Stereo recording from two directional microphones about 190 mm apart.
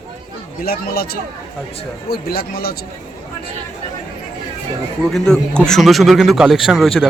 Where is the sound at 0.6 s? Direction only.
55° left (ahead or behind).